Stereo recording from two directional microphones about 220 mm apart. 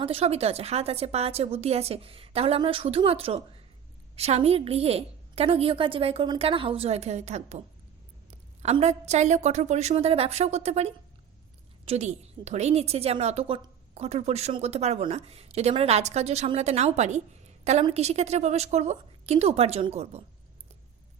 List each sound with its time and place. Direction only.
0.0 s a woman's voice: 25° right (ahead or behind)